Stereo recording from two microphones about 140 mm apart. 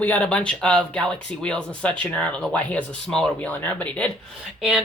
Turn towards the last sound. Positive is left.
turn(degrees=-5)  # may be behind; listen again after turning